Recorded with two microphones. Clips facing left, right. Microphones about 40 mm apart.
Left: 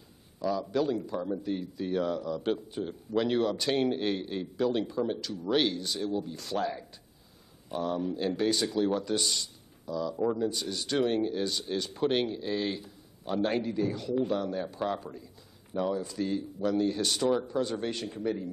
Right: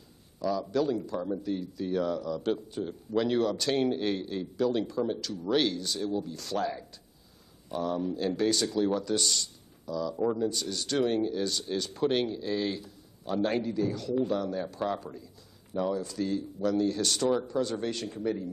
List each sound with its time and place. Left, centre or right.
0.4 s speech: centre
1.5 s speech: left
10.1 s speech: centre
10.4 s speech: centre